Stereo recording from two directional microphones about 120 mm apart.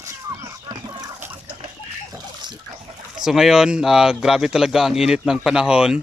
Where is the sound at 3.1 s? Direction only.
5° right (ahead or behind).